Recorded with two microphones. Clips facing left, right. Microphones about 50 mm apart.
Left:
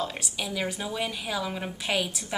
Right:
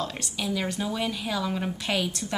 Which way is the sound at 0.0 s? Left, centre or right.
Centre.